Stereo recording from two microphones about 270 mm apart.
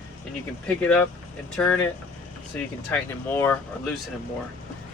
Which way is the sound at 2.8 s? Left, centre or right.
Centre.